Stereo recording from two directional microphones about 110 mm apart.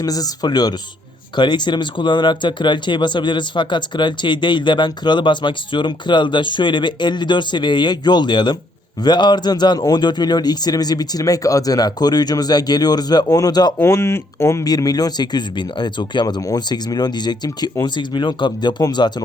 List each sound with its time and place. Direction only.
0.0 s a man's voice: 35° left (ahead or behind)
13.8 s a man's voice: 25° left (ahead or behind); by 19.2 s 40° left (ahead or behind)